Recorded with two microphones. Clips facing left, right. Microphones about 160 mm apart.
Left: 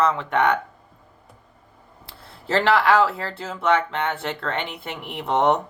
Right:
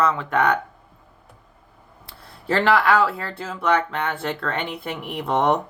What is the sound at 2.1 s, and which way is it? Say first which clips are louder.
Speech: even; 30° left (ahead or behind).